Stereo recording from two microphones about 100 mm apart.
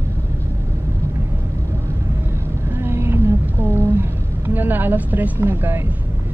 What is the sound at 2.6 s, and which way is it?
Vehicle, 25° right (ahead or behind).